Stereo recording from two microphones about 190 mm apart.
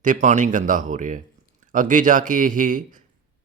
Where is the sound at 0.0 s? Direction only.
40° right (ahead or behind).